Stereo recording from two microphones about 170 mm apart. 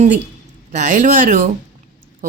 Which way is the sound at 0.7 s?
45° right (ahead or behind).